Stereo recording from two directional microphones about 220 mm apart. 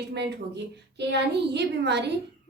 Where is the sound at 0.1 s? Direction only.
50° right (ahead or behind).